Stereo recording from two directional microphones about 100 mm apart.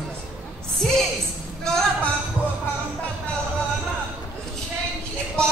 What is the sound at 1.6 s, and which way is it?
Speech, 5° left (ahead or behind).